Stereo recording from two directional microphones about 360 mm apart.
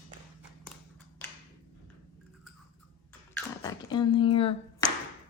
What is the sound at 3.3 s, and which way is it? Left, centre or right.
Finger snapping, centre.